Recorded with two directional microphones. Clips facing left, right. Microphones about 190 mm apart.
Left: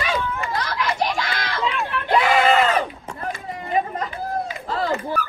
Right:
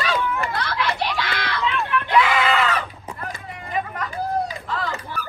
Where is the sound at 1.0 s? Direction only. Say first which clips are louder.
Left 2 dB; 45° left (ahead or behind).